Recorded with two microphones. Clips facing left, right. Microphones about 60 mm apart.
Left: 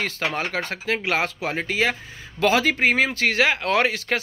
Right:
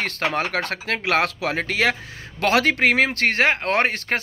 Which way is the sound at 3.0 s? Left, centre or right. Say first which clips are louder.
Right 1 dB; right.